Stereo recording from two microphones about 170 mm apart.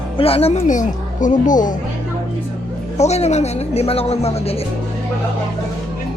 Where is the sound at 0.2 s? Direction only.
35° left (ahead or behind); by 1.7 s 50° left (ahead or behind).